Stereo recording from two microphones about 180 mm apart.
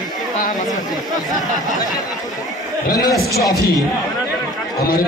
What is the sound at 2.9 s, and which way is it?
Speech, 20° left (ahead or behind).